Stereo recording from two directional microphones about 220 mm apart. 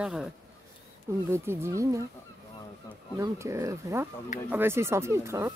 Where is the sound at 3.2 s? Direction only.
15° right (ahead or behind).